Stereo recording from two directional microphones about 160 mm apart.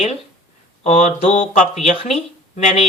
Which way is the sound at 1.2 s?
40° left (ahead or behind).